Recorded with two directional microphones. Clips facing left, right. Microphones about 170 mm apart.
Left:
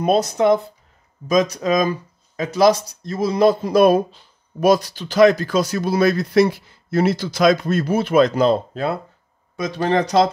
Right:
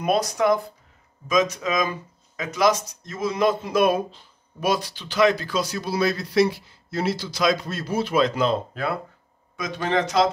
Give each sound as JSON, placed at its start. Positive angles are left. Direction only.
{"t": 0.0, "sound": "speech", "side_deg": 25}
{"t": 1.2, "sound": "speech", "side_deg": 35}